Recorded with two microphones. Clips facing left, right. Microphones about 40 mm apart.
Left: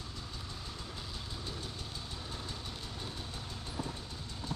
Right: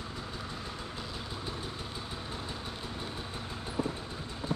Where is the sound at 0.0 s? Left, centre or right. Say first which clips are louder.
Right 6 dB; right.